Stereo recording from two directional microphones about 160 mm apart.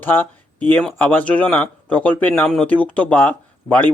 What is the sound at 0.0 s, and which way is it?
Speech, 15° left (ahead or behind).